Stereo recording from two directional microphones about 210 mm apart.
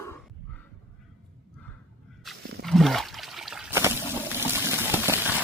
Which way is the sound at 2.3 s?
Centre (ahead or behind).